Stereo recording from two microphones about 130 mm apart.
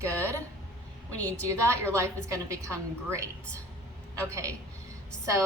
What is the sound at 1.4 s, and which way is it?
A woman's voice, 20° right (ahead or behind).